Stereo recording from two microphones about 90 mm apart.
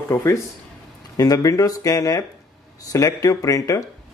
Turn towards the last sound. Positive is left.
turn(degrees=35)  # may be behind; listen again after turning